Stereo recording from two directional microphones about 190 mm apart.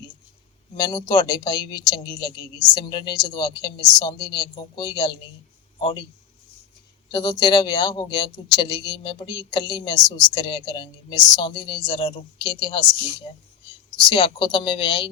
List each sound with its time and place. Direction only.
0.8 s speech: 20° left (ahead or behind)
7.1 s speech: 25° left (ahead or behind)
13.9 s speech: 25° left (ahead or behind)